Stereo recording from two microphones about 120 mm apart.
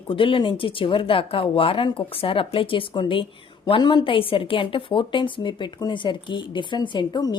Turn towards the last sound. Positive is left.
turn(degrees=35)  # may be behind; listen again after turning